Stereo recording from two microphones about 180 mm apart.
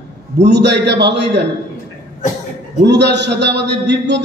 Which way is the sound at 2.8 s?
70° right (ahead or behind).